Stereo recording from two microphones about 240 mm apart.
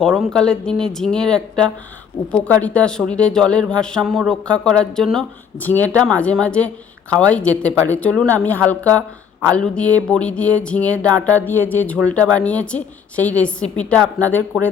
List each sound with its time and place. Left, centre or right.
0.0 s music: centre